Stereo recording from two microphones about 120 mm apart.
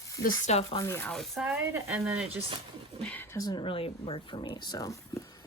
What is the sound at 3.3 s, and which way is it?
Speech, 30° left (ahead or behind).